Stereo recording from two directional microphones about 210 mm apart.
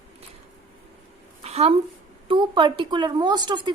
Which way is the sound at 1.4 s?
30° right (ahead or behind).